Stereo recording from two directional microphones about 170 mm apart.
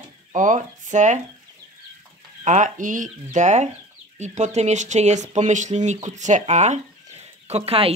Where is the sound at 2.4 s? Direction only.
45° right (ahead or behind).